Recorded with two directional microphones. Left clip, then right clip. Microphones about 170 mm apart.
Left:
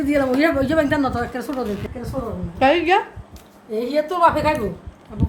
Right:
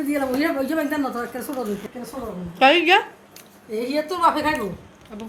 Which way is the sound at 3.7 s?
20° right (ahead or behind).